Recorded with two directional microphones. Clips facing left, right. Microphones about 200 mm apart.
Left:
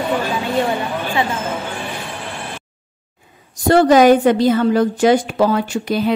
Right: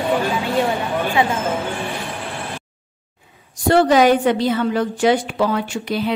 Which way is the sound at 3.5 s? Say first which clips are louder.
Left 3 dB; 45° left (ahead or behind).